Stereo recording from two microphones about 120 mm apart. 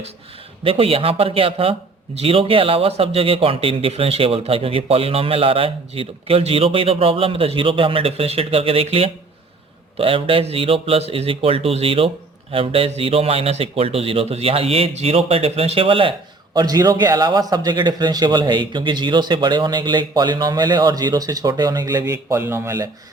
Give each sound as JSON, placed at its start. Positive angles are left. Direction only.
{"t": 0.6, "sound": "speech", "side_deg": -50}
{"t": 16.6, "sound": "a man's voice", "side_deg": -30}